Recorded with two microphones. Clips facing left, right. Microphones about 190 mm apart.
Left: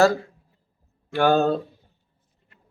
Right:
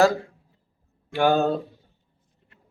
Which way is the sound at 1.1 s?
15° right (ahead or behind).